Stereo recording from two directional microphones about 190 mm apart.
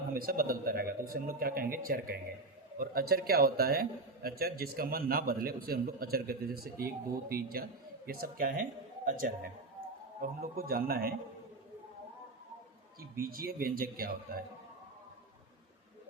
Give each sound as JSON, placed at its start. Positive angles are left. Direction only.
{"t": 0.1, "sound": "a man's voice", "side_deg": -50}
{"t": 13.1, "sound": "a man's voice", "side_deg": -50}